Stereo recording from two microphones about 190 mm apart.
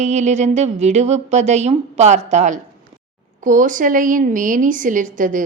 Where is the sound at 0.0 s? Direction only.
35° right (ahead or behind).